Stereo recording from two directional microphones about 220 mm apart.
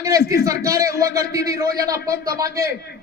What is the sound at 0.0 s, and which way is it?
A man's voice, 15° right (ahead or behind).